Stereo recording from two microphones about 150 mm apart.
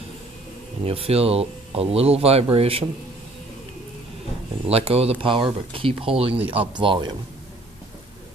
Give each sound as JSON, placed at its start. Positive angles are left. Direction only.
{"t": 0.8, "sound": "speech", "side_deg": -40}
{"t": 4.6, "sound": "speech", "side_deg": -40}